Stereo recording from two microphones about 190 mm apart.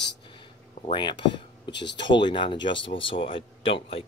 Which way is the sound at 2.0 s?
25° left (ahead or behind).